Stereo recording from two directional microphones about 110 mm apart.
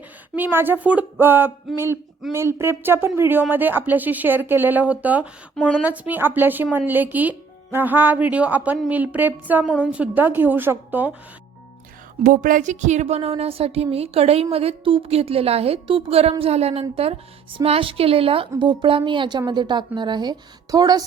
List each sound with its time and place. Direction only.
0.3 s speech: 20° right (ahead or behind)
12.6 s a woman's voice: 90° right; by 18.4 s 55° right (ahead or behind)
18.6 s a woman's voice: 45° right (ahead or behind)